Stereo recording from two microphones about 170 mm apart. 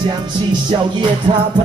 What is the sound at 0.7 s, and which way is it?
Music, 25° right (ahead or behind).